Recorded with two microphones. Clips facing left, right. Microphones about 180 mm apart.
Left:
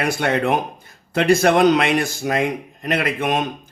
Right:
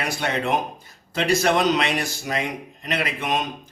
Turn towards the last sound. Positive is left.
turn(degrees=50)  # may be behind; listen again after turning